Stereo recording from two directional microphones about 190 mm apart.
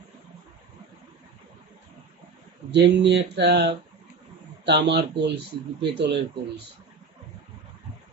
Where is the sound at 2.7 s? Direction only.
65° right (ahead or behind).